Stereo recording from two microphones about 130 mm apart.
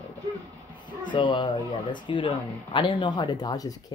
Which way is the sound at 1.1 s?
35° left (ahead or behind).